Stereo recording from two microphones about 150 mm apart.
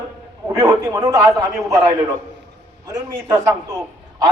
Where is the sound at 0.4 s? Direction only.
20° right (ahead or behind).